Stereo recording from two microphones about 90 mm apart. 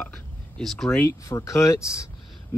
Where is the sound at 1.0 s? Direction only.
35° left (ahead or behind).